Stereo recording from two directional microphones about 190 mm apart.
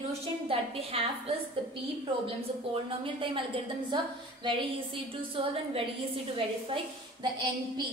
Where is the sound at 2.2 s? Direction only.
30° right (ahead or behind).